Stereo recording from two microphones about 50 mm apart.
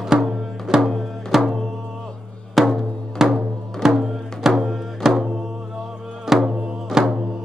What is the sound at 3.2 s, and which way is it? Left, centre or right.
Music, centre.